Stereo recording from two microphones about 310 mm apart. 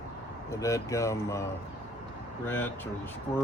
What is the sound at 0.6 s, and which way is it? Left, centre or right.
Speech, centre.